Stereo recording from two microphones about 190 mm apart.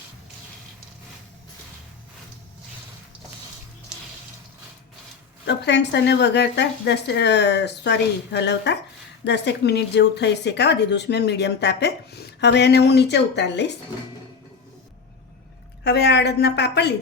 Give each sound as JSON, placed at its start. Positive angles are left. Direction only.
{"t": 5.5, "sound": "speech", "side_deg": 65}
{"t": 15.8, "sound": "speech", "side_deg": 60}